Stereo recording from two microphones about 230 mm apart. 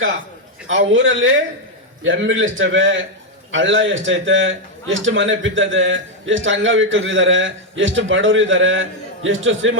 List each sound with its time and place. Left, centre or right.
0.7 s a man's voice: right